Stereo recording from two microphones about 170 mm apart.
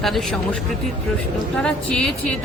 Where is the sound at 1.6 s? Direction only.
5° left (ahead or behind).